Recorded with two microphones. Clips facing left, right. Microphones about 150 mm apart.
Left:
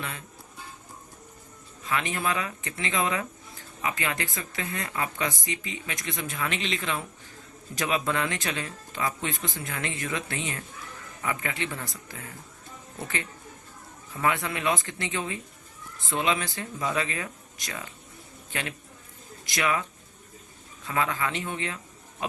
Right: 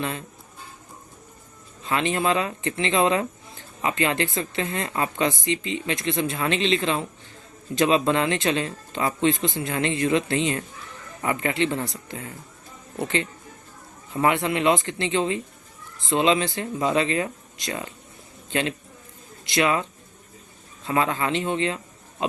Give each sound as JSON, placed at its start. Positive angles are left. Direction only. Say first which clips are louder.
{"t": 1.8, "sound": "speech", "louder": "right 5 dB", "side_deg": -30}
{"t": 19.5, "sound": "speech", "louder": "right 6 dB", "side_deg": -25}
{"t": 20.8, "sound": "speech", "louder": "right 5 dB", "side_deg": -30}